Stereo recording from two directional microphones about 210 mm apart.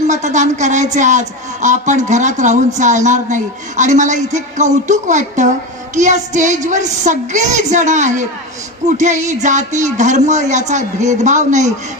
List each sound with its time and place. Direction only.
0.1 s speech: 35° right (ahead or behind)